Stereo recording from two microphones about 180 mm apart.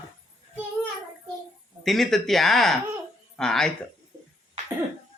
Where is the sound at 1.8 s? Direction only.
Centre (ahead or behind).